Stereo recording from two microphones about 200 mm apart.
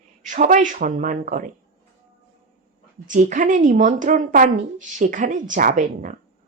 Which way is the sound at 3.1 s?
40° right (ahead or behind).